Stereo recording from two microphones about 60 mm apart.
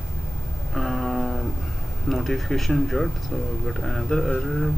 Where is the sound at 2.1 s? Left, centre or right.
Centre.